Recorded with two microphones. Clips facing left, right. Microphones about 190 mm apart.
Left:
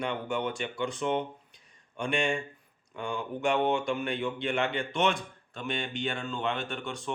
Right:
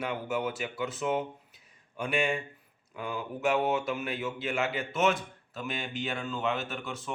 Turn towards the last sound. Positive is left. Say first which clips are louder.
# left 2 dB
turn(degrees=-5)  # may be behind; listen again after turning